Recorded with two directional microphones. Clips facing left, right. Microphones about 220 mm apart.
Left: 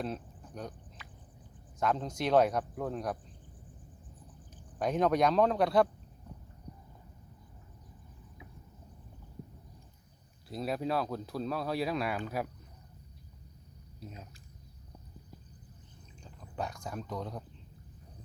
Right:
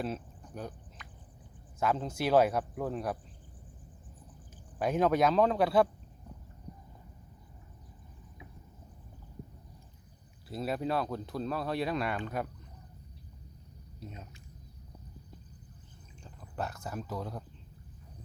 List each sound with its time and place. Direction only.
0.0 s speech: 5° right (ahead or behind)
1.8 s speech: 5° right (ahead or behind)
4.8 s speech: 5° right (ahead or behind)
10.5 s speech: centre (ahead or behind)
14.0 s speech: centre (ahead or behind)
16.2 s speech: 5° right (ahead or behind)